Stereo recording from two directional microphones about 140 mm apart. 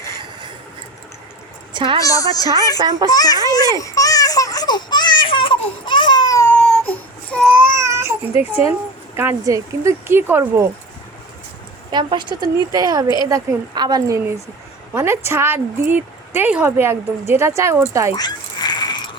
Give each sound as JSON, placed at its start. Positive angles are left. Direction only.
{"t": 1.7, "sound": "a woman's voice", "side_deg": -35}
{"t": 2.0, "sound": "a woman's voice", "side_deg": 25}
{"t": 3.8, "sound": "a sound", "side_deg": 25}
{"t": 6.5, "sound": "child singing", "side_deg": 5}
{"t": 7.5, "sound": "baby cry", "side_deg": -15}
{"t": 9.1, "sound": "a woman's voice", "side_deg": -20}
{"t": 11.9, "sound": "speech", "side_deg": -35}
{"t": 14.9, "sound": "a woman's voice", "side_deg": -20}
{"t": 18.2, "sound": "a sound", "side_deg": 30}